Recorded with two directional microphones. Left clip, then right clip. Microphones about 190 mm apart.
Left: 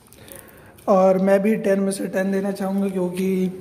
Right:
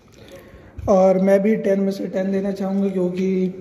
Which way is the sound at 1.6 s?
10° left (ahead or behind).